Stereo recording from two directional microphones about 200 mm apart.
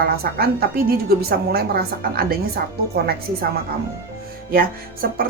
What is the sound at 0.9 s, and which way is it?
Speech, 50° right (ahead or behind).